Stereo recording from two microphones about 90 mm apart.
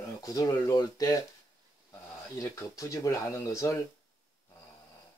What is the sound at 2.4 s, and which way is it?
Speech, 40° left (ahead or behind).